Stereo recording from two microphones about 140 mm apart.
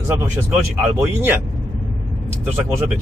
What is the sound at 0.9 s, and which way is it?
Speech, 15° right (ahead or behind).